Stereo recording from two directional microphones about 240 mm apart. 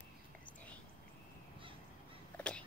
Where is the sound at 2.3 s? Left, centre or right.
Centre.